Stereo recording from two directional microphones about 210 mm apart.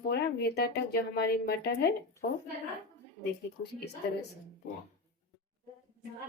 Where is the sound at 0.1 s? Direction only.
50° left (ahead or behind).